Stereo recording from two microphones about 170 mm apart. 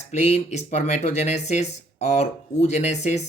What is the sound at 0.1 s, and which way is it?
Speech, 40° left (ahead or behind).